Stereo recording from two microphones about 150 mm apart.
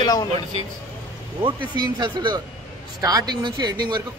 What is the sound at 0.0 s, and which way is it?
Speech, 25° left (ahead or behind).